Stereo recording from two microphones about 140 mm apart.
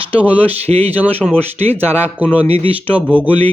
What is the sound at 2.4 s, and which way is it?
Speech, 45° right (ahead or behind).